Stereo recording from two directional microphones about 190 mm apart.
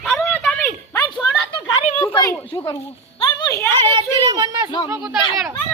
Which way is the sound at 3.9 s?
20° right (ahead or behind).